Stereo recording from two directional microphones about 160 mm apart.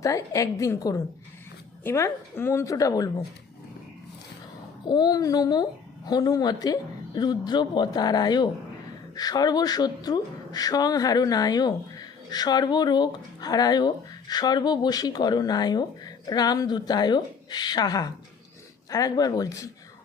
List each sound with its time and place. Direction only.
0.0 s a woman's voice: 20° left (ahead or behind)
4.9 s speech: 25° left (ahead or behind)